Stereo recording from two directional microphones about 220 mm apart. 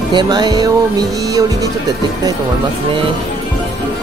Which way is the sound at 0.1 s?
20° right (ahead or behind).